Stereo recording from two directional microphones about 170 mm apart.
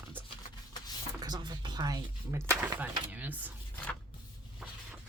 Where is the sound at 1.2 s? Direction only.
25° right (ahead or behind).